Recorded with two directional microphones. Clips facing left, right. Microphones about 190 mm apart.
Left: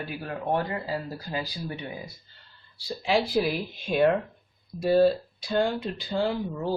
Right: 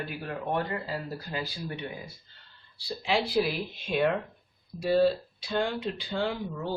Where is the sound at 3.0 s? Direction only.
45° left (ahead or behind).